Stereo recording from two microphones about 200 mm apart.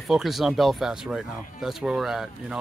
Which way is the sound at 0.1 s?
Centre (ahead or behind).